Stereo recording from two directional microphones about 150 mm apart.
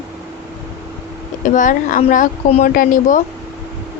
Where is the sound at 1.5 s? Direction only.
60° left (ahead or behind).